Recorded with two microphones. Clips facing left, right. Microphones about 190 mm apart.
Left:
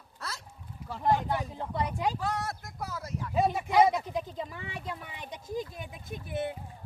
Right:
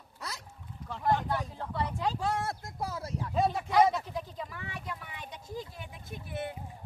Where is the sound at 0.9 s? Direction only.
10° left (ahead or behind).